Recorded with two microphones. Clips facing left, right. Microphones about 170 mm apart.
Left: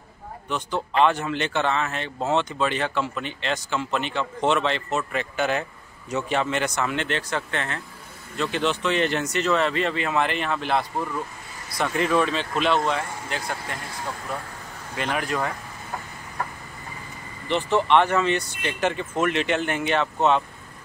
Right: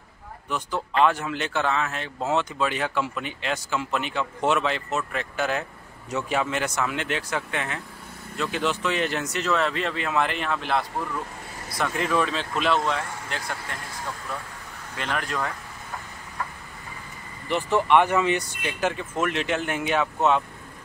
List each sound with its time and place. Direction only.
0.5 s speech: 5° right (ahead or behind)
15.0 s speech: 5° left (ahead or behind)
17.5 s speech: 10° right (ahead or behind)